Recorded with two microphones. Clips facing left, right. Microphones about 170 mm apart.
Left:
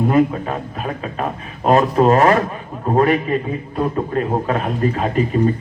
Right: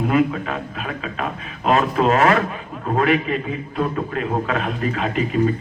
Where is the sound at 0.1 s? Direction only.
35° left (ahead or behind).